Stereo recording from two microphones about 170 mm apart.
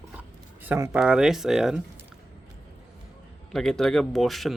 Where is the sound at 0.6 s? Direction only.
15° right (ahead or behind).